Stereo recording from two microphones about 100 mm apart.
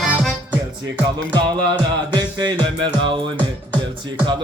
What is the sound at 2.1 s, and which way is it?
Music, 45° right (ahead or behind).